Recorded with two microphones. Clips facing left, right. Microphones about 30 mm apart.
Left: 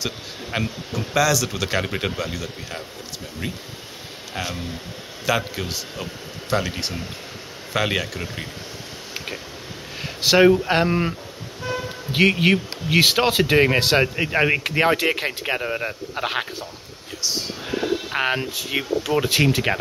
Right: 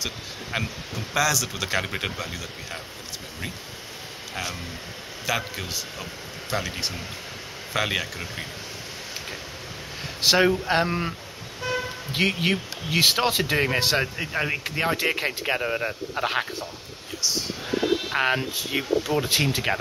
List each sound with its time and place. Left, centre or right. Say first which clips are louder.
0.0 s speech: left 3 dB; centre
5.2 s a man's voice: left 5 dB; centre
10.2 s a man's voice: left 5 dB; centre; by 15.0 s left
15.0 s a man's voice: left 3 dB; centre
18.1 s a man's voice: left 1 dB; centre